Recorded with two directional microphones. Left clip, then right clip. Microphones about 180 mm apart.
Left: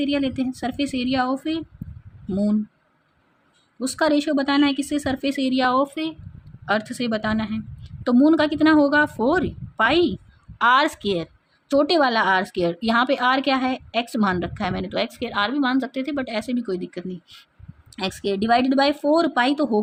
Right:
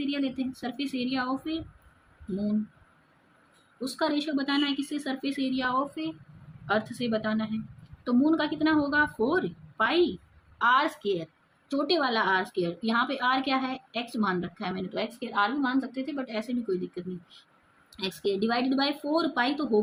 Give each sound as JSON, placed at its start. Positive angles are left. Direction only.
{"t": 0.0, "sound": "a woman's voice", "side_deg": 65}
{"t": 3.8, "sound": "a woman's voice", "side_deg": 65}